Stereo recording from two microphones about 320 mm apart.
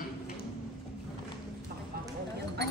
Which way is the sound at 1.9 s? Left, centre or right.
Right.